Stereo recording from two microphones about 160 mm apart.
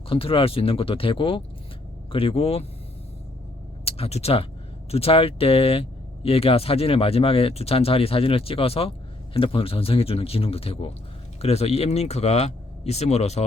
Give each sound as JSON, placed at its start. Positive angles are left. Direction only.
{"t": 0.1, "sound": "speech", "side_deg": 35}
{"t": 3.8, "sound": "speech", "side_deg": 40}